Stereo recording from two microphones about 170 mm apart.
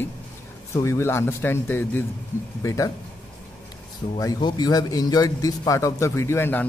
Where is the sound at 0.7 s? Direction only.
15° left (ahead or behind).